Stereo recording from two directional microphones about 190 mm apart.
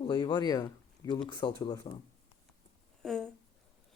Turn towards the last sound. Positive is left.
turn(degrees=0)  # may be behind; listen again after turning